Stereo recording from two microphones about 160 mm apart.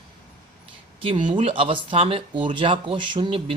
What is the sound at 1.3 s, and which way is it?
Speech, 35° right (ahead or behind).